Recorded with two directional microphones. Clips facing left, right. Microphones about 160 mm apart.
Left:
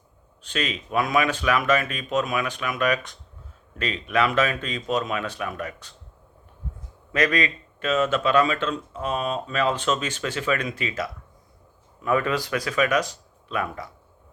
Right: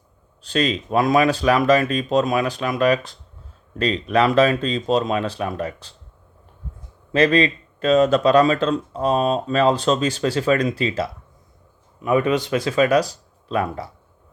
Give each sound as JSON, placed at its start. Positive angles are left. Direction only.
{"t": 0.4, "sound": "speech", "side_deg": -35}
{"t": 7.1, "sound": "speech", "side_deg": -30}
{"t": 12.0, "sound": "speech", "side_deg": -20}